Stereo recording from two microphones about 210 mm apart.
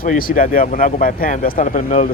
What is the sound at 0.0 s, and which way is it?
Speech, 40° left (ahead or behind).